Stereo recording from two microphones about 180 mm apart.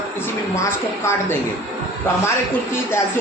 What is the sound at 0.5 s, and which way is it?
Speech, 15° left (ahead or behind).